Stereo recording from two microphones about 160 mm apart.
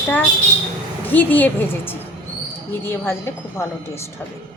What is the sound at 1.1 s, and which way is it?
A woman's voice, 10° left (ahead or behind).